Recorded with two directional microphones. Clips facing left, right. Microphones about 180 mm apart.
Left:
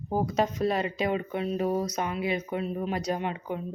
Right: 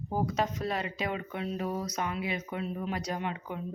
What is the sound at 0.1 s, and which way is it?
Speech, 25° left (ahead or behind).